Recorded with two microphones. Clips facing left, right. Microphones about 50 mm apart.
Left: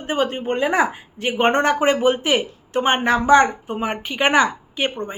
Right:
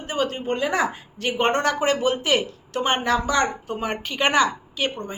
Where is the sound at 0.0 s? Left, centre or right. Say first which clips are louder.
Left 4 dB; left.